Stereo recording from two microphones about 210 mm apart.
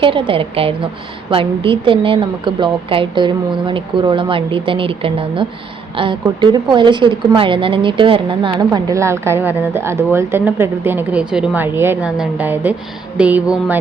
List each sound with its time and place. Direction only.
0.0 s a woman's voice: 25° right (ahead or behind); by 13.7 s 5° right (ahead or behind)